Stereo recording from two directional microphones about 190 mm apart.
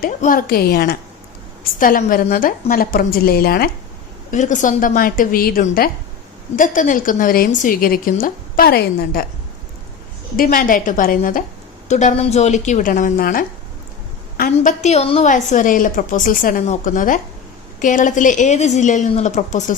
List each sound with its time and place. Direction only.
0.0 s a woman's voice: 45° left (ahead or behind)
4.3 s a woman's voice: 40° left (ahead or behind)
10.3 s a woman's voice: 50° left (ahead or behind)